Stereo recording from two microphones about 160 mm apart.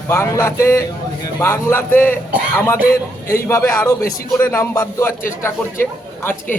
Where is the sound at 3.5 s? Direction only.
15° left (ahead or behind).